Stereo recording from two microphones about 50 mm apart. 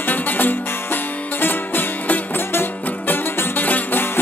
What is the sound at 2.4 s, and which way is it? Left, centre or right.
Music, left.